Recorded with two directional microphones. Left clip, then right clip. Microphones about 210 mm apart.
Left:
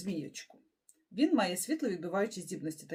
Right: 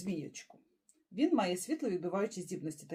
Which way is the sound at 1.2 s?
15° left (ahead or behind).